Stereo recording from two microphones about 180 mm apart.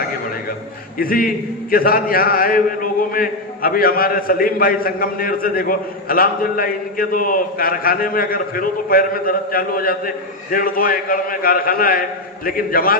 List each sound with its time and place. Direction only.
0.9 s a man's voice: 55° left (ahead or behind)